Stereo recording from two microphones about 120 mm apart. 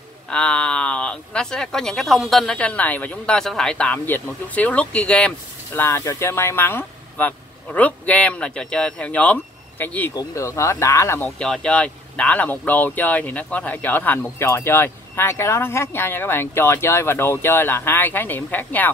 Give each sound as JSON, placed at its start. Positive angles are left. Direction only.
{"t": 0.3, "sound": "speech", "side_deg": 10}
{"t": 5.7, "sound": "speech", "side_deg": 20}
{"t": 10.1, "sound": "speech", "side_deg": 25}
{"t": 11.2, "sound": "speech", "side_deg": 5}